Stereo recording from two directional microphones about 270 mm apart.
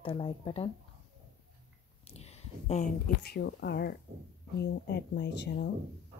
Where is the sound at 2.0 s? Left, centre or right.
Left.